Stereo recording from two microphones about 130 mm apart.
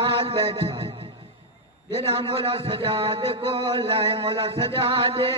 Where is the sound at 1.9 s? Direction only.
45° right (ahead or behind).